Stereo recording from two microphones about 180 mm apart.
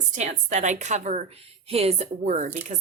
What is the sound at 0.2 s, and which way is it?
A woman's voice, 40° right (ahead or behind).